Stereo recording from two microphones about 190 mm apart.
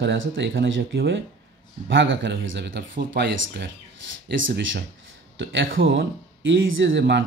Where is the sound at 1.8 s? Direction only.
75° right (ahead or behind); by 3.7 s 60° right (ahead or behind).